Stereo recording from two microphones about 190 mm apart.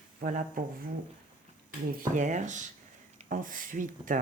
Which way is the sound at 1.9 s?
45° right (ahead or behind).